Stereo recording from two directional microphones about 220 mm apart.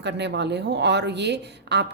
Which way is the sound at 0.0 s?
50° right (ahead or behind).